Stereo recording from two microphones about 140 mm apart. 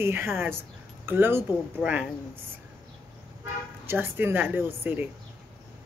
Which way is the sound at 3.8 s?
15° right (ahead or behind).